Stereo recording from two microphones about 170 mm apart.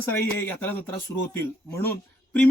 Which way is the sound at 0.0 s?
10° left (ahead or behind).